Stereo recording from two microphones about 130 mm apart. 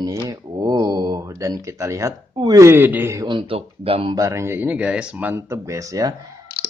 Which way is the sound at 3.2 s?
40° right (ahead or behind).